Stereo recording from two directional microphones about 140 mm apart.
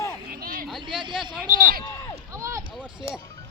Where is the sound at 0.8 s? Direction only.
35° right (ahead or behind).